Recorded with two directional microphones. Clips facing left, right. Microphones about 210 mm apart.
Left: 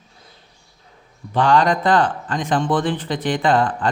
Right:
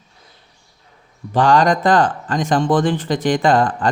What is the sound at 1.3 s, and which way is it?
A man's voice, 45° right (ahead or behind).